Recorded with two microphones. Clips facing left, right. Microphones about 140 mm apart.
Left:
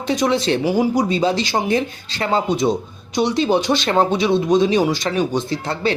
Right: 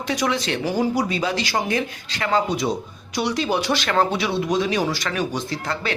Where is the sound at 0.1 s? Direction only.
25° left (ahead or behind).